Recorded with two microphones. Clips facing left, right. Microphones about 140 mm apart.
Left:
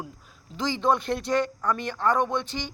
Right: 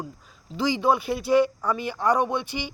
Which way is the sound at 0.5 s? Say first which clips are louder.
Right 2 dB; 10° right (ahead or behind).